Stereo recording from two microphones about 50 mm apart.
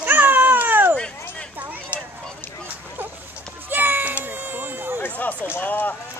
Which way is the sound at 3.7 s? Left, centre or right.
Right.